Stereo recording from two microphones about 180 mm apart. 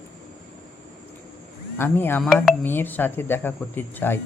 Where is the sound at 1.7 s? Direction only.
10° left (ahead or behind).